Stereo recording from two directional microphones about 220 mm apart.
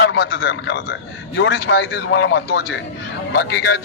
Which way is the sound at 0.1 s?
55° left (ahead or behind).